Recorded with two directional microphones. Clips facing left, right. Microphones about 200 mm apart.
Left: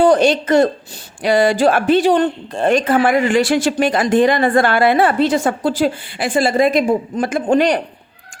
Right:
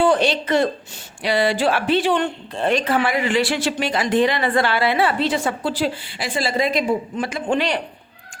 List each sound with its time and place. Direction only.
0.0 s a woman's voice: 45° left (ahead or behind)